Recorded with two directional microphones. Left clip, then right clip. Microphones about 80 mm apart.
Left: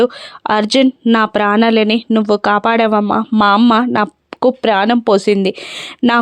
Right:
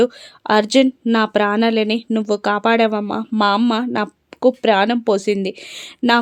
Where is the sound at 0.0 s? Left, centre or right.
Left.